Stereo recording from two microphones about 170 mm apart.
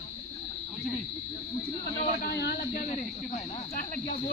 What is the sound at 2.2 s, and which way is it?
Speech, 70° left (ahead or behind).